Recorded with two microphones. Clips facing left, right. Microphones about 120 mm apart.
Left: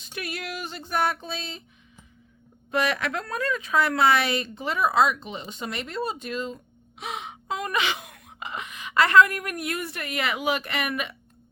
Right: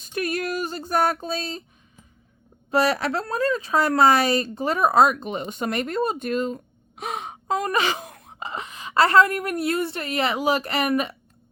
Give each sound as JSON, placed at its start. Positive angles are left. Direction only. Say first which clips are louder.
{"t": 0.0, "sound": "speech", "louder": "right 8 dB", "side_deg": -45}
{"t": 2.6, "sound": "speech", "louder": "right 5 dB", "side_deg": -35}
{"t": 7.0, "sound": "gasp", "louder": "right 4 dB", "side_deg": -45}